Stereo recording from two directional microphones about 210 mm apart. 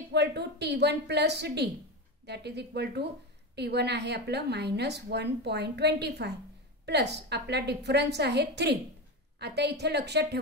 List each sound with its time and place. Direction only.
0.1 s a woman's voice: 50° right (ahead or behind)